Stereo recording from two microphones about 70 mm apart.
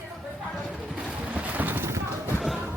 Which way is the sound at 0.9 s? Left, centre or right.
Centre.